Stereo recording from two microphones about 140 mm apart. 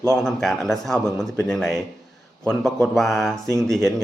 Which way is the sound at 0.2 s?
5° left (ahead or behind).